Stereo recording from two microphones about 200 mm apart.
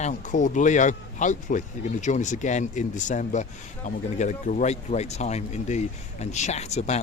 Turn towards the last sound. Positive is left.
turn(degrees=35)  # may be behind; listen again after turning